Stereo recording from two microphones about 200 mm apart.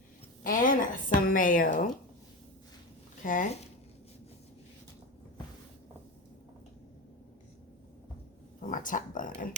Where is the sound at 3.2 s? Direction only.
40° left (ahead or behind).